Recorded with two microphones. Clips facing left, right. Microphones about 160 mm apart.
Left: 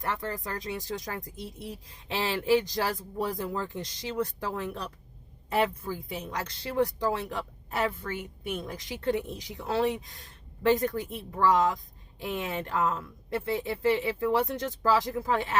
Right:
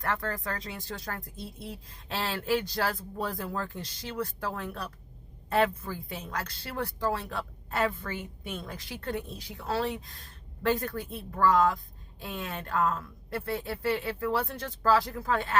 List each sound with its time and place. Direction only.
0.0 s a woman's voice: 15° left (ahead or behind)